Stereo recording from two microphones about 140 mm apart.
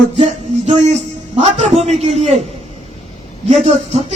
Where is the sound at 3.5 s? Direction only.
50° right (ahead or behind).